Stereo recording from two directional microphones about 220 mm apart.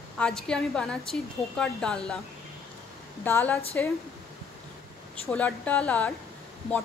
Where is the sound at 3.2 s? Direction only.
10° left (ahead or behind).